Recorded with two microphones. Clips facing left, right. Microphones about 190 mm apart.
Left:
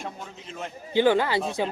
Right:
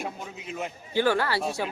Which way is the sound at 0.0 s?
10° right (ahead or behind).